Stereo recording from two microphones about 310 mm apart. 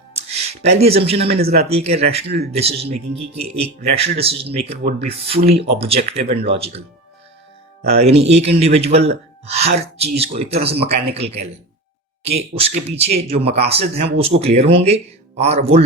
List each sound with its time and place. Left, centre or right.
0.1 s speech: centre
12.4 s speech: centre